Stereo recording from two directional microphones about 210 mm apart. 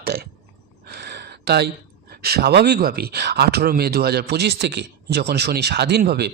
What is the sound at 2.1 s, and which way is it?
Speech, 45° right (ahead or behind).